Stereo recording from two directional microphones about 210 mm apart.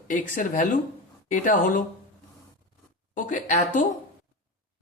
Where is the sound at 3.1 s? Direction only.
35° left (ahead or behind).